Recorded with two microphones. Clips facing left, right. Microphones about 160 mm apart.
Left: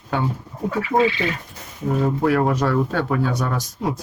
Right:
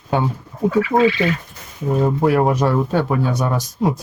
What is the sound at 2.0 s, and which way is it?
Speech, 20° right (ahead or behind).